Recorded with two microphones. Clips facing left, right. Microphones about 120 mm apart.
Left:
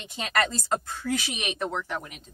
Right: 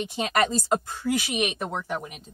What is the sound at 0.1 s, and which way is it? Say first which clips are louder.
Speech: right 2 dB; 20° right (ahead or behind).